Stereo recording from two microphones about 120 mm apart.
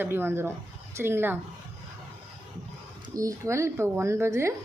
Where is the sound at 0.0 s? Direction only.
20° right (ahead or behind).